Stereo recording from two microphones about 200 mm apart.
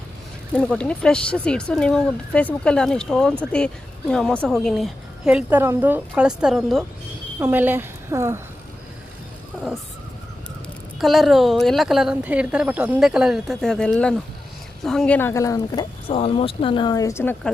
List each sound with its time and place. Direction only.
0.5 s a woman's voice: 5° left (ahead or behind); by 8.4 s 15° right (ahead or behind)
11.0 s a woman's voice: centre (ahead or behind)